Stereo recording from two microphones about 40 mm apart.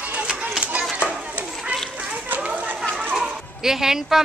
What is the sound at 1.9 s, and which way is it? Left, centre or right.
Run, right.